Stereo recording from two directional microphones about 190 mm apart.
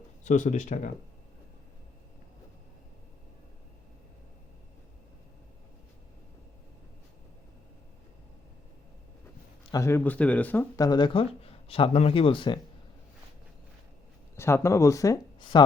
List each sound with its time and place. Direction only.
0.3 s speech: 40° left (ahead or behind)
9.7 s speech: 15° left (ahead or behind)
10.8 s speech: 25° left (ahead or behind)
14.3 s speech: 15° left (ahead or behind)